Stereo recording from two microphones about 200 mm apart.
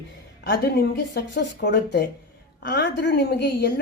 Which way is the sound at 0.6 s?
55° left (ahead or behind).